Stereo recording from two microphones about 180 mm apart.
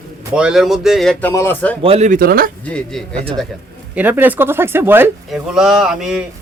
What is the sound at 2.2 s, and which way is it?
Speech, 55° right (ahead or behind).